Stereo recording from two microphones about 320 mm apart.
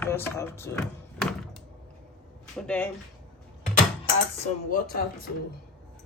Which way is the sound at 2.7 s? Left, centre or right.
Centre.